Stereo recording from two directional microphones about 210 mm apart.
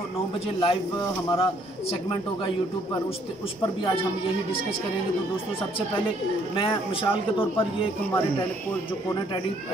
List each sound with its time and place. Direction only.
0.6 s speech: 25° left (ahead or behind)
6.5 s speech: 25° left (ahead or behind)